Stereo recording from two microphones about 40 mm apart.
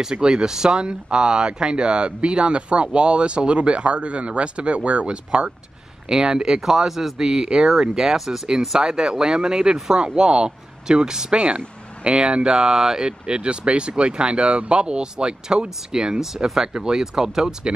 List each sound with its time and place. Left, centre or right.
0.1 s speech: right
13.3 s speech: right